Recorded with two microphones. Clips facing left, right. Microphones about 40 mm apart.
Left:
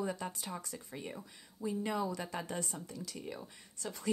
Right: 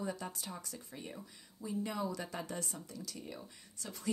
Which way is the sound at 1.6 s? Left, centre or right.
Left.